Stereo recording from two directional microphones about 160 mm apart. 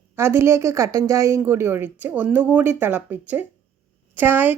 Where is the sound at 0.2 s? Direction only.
15° right (ahead or behind).